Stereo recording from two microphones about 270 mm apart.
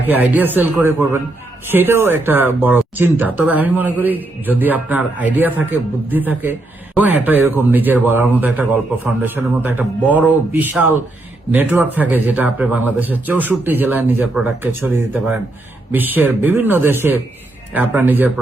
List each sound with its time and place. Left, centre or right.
0.1 s speech: centre